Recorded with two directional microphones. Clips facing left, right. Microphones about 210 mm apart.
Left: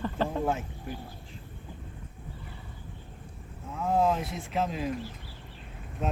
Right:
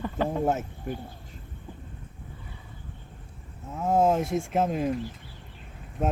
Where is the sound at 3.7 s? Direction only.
45° right (ahead or behind).